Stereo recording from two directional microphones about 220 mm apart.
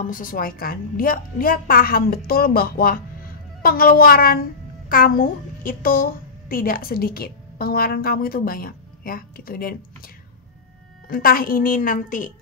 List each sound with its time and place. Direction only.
0.0 s a woman's voice: 40° left (ahead or behind)